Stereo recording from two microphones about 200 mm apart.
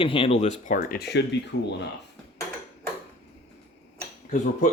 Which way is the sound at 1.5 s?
60° left (ahead or behind).